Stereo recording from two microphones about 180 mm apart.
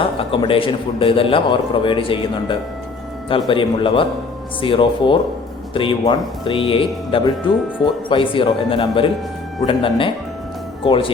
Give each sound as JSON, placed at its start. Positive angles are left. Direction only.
{"t": 0.0, "sound": "a man's voice", "side_deg": 30}